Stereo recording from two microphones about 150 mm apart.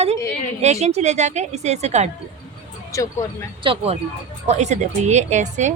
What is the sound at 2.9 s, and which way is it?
Speech, 20° left (ahead or behind).